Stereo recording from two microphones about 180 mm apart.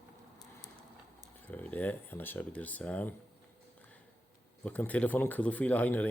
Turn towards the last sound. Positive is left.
turn(degrees=10)  # may be behind; listen again after turning